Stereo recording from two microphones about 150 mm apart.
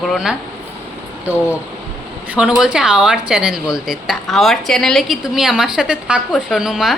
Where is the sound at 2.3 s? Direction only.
5° right (ahead or behind).